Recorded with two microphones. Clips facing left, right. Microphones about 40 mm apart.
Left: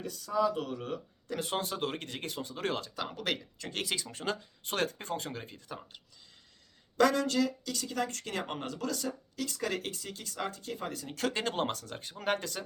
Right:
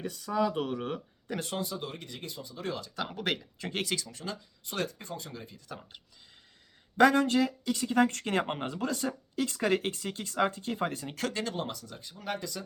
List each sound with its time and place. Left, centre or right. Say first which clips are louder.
0.0 s speech: even; right
1.5 s speech: left 2 dB; left
2.9 s speech: right 2 dB; centre
4.1 s speech: left 4 dB; left
6.9 s speech: right 4 dB; right
8.5 s speech: right 3 dB; right
11.5 s speech: left 3 dB; left